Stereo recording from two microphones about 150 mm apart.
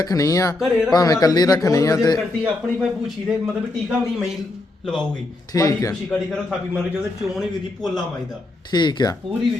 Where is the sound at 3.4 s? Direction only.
5° right (ahead or behind).